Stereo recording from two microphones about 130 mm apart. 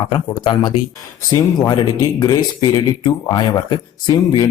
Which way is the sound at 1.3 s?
30° left (ahead or behind).